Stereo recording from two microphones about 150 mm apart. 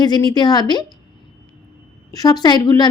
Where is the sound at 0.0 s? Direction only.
30° left (ahead or behind).